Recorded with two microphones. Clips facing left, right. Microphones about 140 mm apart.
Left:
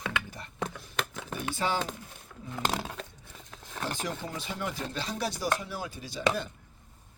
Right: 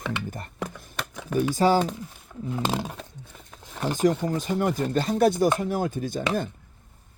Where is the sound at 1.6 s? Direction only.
40° right (ahead or behind).